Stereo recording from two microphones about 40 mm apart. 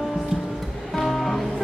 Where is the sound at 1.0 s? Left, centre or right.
Centre.